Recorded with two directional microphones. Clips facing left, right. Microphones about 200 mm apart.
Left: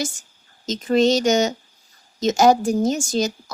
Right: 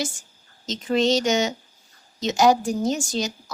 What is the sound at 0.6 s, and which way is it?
Speech, 45° left (ahead or behind).